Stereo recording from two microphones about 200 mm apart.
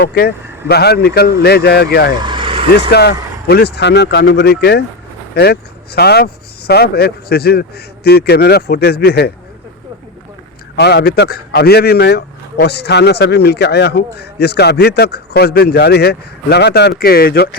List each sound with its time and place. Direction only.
0.0 s speech: 55° left (ahead or behind)
2.2 s vehicle: 25° right (ahead or behind)
2.9 s speech: 55° left (ahead or behind)
10.8 s speech: 55° left (ahead or behind)